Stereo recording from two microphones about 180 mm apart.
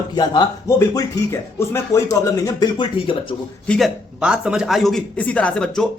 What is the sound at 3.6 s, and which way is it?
A man's voice, 5° left (ahead or behind).